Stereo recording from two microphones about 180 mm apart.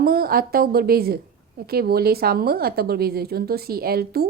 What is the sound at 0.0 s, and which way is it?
A woman's voice, 55° right (ahead or behind).